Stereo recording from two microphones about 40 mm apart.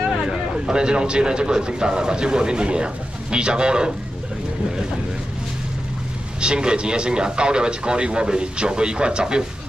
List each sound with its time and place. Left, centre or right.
0.3 s a man's voice: centre
6.4 s a man's voice: right